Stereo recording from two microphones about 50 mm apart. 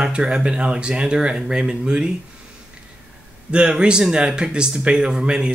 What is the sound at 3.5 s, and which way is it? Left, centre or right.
Speech, centre.